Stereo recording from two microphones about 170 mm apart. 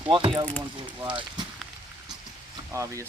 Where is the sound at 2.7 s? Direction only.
20° right (ahead or behind).